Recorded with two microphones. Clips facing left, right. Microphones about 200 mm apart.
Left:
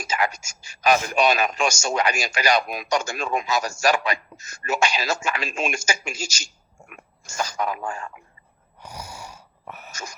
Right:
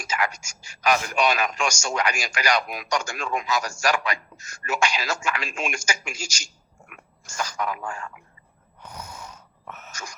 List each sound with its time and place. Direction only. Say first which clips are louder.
0.1 s whispering: left 2 dB; 20° left (ahead or behind)
0.8 s a man's voice: left 3 dB; 25° left (ahead or behind)
7.3 s a man's voice: left 2 dB; 30° left (ahead or behind)
8.8 s a sound: left 2 dB; 10° left (ahead or behind)